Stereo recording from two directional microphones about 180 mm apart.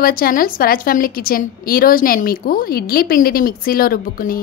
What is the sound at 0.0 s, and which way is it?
A woman's voice, 55° left (ahead or behind).